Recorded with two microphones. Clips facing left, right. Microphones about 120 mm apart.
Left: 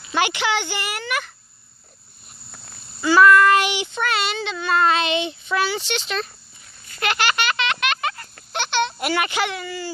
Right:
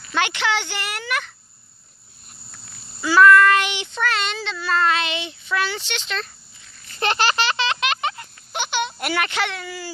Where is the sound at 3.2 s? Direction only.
15° left (ahead or behind).